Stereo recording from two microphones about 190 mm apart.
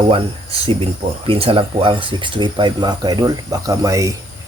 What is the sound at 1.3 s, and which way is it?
Speech, 30° right (ahead or behind).